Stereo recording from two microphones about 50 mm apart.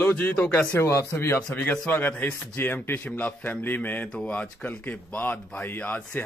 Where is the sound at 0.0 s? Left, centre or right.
Left.